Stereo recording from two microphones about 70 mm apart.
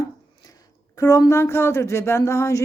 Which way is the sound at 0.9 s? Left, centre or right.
Left.